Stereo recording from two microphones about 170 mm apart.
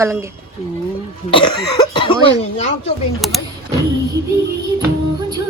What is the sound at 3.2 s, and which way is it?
Speech, centre (ahead or behind).